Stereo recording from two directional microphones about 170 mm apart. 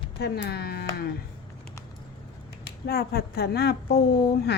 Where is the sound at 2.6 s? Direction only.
65° left (ahead or behind).